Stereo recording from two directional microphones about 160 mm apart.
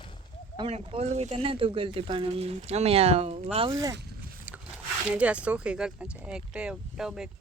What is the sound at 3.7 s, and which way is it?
Speech, 20° right (ahead or behind).